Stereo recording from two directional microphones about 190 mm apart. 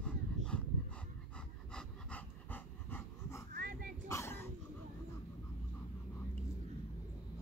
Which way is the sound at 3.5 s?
50° right (ahead or behind).